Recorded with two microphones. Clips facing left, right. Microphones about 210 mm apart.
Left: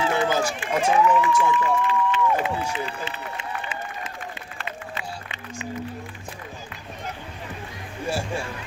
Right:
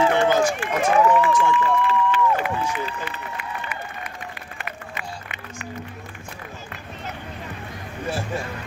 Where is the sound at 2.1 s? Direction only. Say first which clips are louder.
Right 1 dB; 25° left (ahead or behind).